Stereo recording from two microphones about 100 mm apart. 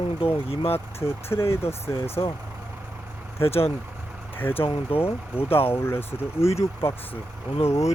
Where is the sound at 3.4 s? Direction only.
75° left (ahead or behind).